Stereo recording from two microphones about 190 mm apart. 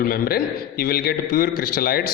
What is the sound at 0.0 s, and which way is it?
A man's voice, 55° left (ahead or behind).